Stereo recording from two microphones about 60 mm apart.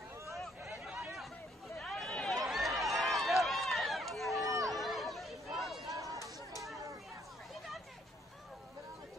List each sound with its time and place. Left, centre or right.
1.9 s run: centre
4.6 s chatter: centre
5.9 s chatter: right